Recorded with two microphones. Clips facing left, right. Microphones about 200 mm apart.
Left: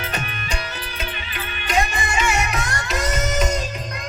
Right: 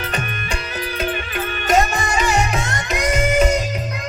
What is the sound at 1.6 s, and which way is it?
Music, 45° right (ahead or behind).